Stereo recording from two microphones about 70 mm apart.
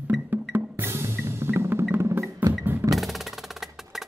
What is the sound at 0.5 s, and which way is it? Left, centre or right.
Music, right.